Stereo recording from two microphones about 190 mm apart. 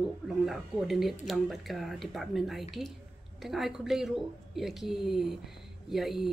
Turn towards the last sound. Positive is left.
turn(degrees=0)  # may be behind; listen again after turning